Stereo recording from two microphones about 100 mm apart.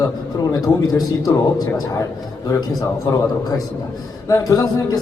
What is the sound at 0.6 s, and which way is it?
Speech, 40° left (ahead or behind).